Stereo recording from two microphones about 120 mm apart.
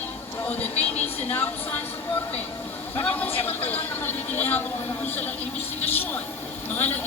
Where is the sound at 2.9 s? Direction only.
15° left (ahead or behind).